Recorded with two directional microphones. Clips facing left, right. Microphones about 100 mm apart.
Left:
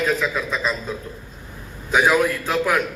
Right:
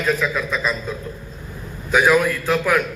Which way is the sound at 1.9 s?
20° left (ahead or behind).